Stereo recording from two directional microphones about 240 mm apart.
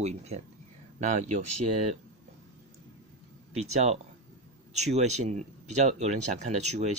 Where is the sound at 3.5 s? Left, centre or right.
Right.